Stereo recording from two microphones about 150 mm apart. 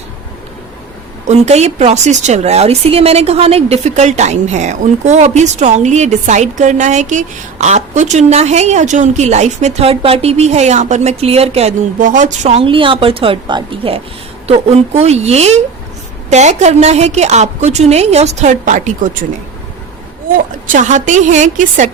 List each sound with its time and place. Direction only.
1.3 s speech: 45° right (ahead or behind)
11.9 s speech: 60° right (ahead or behind)
20.3 s a woman's voice: 55° right (ahead or behind)